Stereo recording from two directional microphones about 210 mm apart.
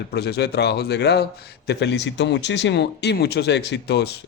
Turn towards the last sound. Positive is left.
turn(degrees=55)  # may be behind; listen again after turning